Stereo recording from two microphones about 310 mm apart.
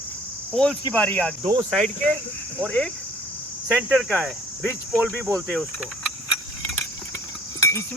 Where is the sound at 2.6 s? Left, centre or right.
Centre.